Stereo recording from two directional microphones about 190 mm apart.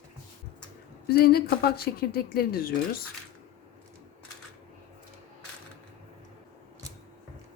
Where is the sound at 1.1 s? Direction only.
55° left (ahead or behind).